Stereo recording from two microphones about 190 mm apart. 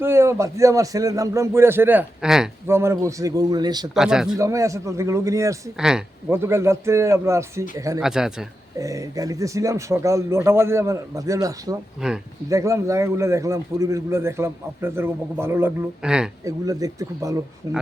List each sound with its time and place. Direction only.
0.0 s a man's voice: 15° right (ahead or behind)
2.6 s a man's voice: 15° right (ahead or behind)
3.9 s speech: 5° right (ahead or behind)
4.4 s a man's voice: 15° right (ahead or behind)
5.7 s speech: 5° right (ahead or behind)
6.3 s a man's voice: 15° right (ahead or behind)
8.0 s speech: centre (ahead or behind)
8.8 s a man's voice: 15° right (ahead or behind)
12.0 s speech: 5° right (ahead or behind)
12.5 s a man's voice: 15° right (ahead or behind)
16.4 s a man's voice: 20° right (ahead or behind)